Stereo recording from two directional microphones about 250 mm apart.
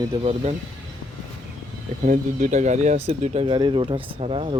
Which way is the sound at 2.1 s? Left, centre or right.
Right.